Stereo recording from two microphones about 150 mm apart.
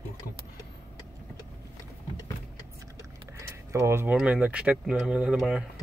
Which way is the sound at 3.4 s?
20° right (ahead or behind).